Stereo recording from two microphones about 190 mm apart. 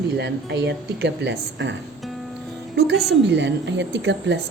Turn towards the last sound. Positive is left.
turn(degrees=-65)  # may be behind; listen again after turning